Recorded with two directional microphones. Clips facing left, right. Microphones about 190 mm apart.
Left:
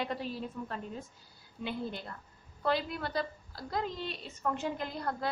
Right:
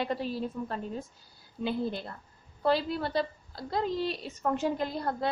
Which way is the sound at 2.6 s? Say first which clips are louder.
Right 5 dB; 30° right (ahead or behind).